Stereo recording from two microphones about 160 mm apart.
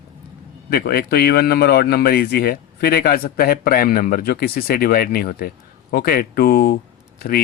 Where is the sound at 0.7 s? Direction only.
70° left (ahead or behind).